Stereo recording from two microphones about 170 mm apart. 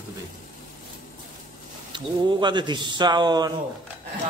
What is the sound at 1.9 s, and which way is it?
Speech, 25° right (ahead or behind).